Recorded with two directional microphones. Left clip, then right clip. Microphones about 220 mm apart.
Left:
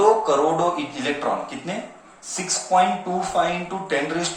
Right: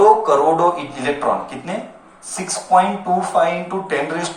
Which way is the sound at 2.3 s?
35° right (ahead or behind).